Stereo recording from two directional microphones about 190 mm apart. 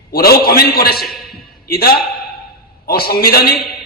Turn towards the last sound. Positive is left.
turn(degrees=55)  # may be behind; listen again after turning